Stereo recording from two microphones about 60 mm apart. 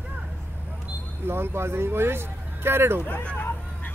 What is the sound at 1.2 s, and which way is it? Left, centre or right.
Speech, right.